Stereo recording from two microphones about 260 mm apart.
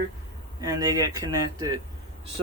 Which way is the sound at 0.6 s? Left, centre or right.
Centre.